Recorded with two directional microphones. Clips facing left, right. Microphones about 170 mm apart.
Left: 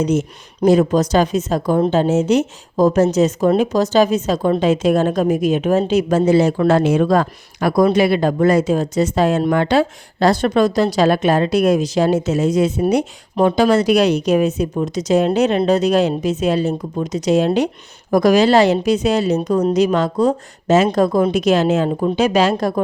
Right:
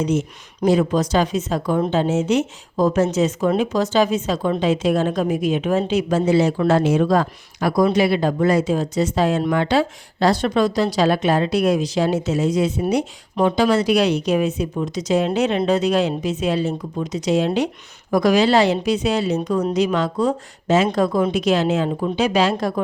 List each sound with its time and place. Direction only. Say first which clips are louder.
0.0 s speech: left 3 dB; 40° left (ahead or behind)